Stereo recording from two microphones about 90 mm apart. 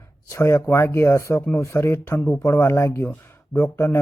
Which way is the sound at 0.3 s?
35° left (ahead or behind).